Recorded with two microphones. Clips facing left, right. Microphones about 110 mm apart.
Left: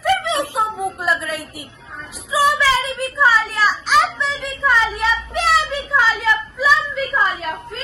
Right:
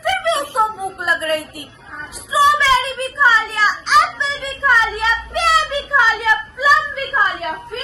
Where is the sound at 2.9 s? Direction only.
Centre (ahead or behind).